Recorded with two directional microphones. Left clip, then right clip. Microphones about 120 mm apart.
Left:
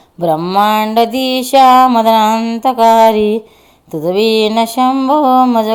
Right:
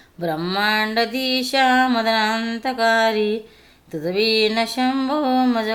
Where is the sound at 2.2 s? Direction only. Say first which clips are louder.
Left 9 dB; 30° left (ahead or behind).